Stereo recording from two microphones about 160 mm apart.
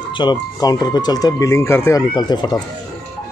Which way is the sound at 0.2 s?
25° left (ahead or behind).